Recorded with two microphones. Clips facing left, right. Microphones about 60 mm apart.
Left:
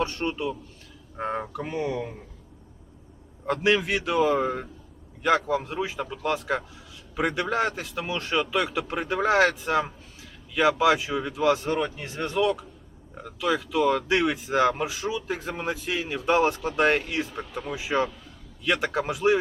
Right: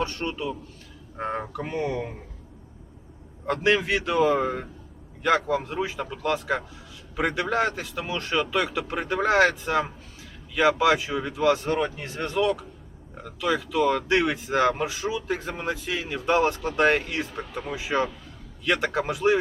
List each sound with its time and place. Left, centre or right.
0.0 s a man's voice: centre
1.1 s speech: centre
3.4 s speech: centre